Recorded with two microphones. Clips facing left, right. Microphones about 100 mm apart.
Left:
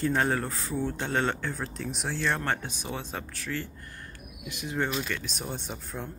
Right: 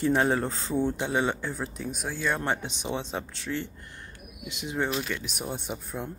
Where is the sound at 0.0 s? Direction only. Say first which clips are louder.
Right 3 dB; 20° right (ahead or behind).